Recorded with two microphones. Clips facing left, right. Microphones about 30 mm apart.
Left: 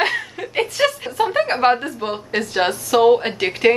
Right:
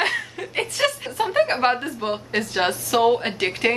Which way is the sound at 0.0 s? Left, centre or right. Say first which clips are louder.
Left 3 dB; centre.